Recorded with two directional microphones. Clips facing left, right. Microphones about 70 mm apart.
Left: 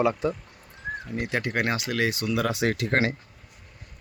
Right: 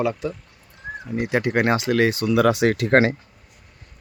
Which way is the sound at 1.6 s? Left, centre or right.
Right.